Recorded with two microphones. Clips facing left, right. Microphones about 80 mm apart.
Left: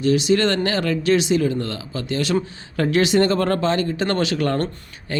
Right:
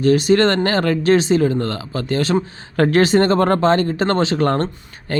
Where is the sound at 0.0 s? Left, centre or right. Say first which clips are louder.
Right 4 dB; right.